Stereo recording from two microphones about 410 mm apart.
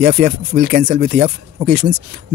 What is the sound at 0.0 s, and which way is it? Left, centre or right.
Speech, right.